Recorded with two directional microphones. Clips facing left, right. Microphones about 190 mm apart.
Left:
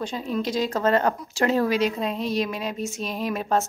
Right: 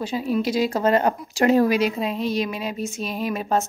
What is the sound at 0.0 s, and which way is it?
A woman's voice, 5° right (ahead or behind).